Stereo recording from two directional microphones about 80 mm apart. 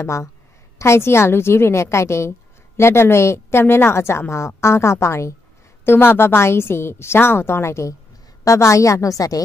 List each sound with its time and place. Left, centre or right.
0.0 s a woman's voice: left